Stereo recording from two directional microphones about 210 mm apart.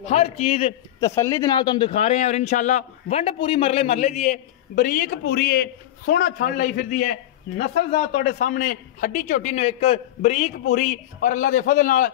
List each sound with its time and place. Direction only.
0.0 s a man's voice: 30° left (ahead or behind)
1.0 s a man's voice: 15° left (ahead or behind); by 12.1 s 40° left (ahead or behind)